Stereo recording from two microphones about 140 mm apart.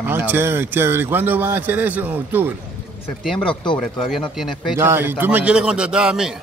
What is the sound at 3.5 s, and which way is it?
Speech, 35° left (ahead or behind).